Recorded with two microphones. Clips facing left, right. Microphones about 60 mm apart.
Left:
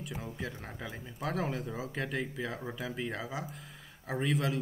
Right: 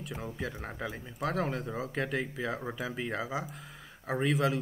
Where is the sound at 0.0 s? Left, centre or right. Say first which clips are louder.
Right 2 dB; centre.